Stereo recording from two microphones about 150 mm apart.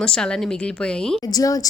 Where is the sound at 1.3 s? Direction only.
25° left (ahead or behind).